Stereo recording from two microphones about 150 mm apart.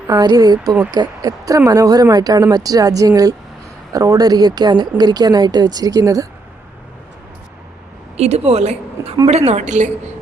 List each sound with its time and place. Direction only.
0.1 s speech: 25° right (ahead or behind)
8.1 s a woman's voice: 45° right (ahead or behind)